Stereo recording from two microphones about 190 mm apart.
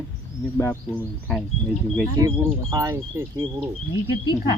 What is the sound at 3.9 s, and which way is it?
Speech, 20° left (ahead or behind).